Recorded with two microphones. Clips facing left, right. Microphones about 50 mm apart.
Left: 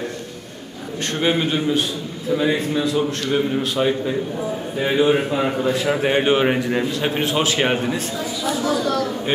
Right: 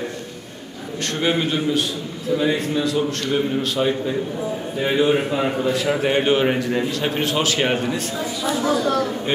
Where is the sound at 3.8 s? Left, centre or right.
Left.